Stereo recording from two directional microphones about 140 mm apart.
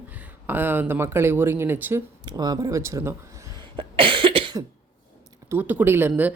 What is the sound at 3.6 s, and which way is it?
Cough, 40° right (ahead or behind).